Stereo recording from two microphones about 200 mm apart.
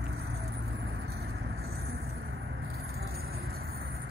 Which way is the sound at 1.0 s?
55° right (ahead or behind).